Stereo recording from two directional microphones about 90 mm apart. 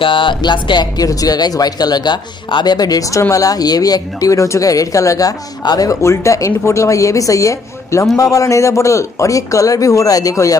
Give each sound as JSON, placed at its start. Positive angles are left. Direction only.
{"t": 0.0, "sound": "speech", "side_deg": 70}